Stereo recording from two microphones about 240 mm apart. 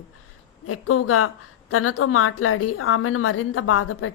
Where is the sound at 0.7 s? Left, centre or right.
Left.